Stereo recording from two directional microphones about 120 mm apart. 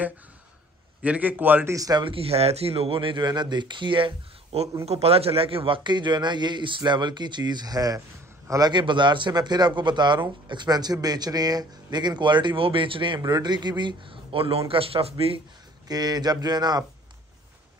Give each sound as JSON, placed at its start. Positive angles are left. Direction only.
{"t": 1.0, "sound": "a man's voice", "side_deg": -15}
{"t": 1.8, "sound": "a man's voice", "side_deg": -30}
{"t": 2.0, "sound": "a man's voice", "side_deg": -55}
{"t": 15.9, "sound": "a man's voice", "side_deg": -35}